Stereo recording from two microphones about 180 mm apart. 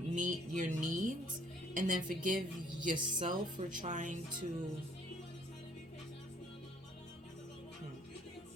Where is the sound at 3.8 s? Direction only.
45° right (ahead or behind).